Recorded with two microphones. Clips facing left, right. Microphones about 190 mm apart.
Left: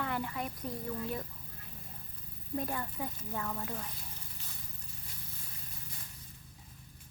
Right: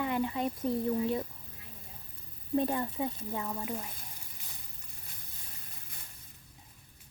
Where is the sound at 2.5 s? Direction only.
25° right (ahead or behind).